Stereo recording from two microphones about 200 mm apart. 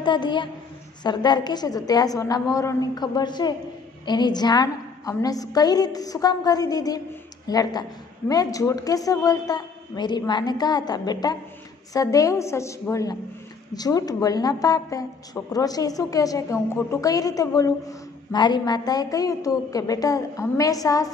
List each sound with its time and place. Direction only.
0.0 s a woman's voice: 25° left (ahead or behind)